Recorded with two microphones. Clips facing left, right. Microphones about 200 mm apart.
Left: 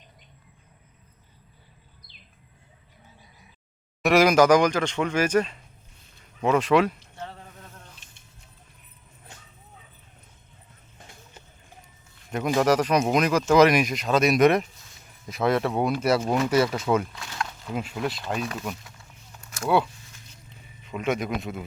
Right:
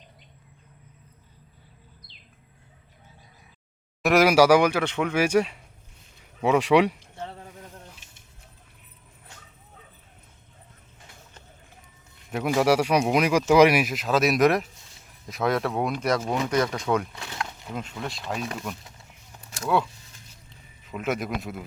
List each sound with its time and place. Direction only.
4.0 s speech: centre (ahead or behind)
7.4 s a sound: 15° right (ahead or behind)
12.3 s speech: 5° right (ahead or behind)
17.1 s speech: 25° right (ahead or behind)
17.7 s speech: 5° left (ahead or behind)
19.6 s speech: 5° left (ahead or behind)